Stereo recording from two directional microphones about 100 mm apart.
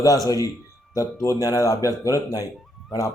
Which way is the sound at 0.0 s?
35° left (ahead or behind).